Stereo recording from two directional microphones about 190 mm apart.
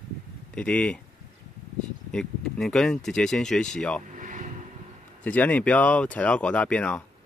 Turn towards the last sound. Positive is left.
turn(degrees=5)  # may be behind; listen again after turning